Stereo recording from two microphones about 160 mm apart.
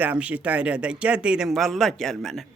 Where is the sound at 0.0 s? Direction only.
10° right (ahead or behind).